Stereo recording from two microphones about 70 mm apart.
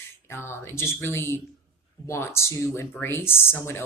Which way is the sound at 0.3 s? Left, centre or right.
Left.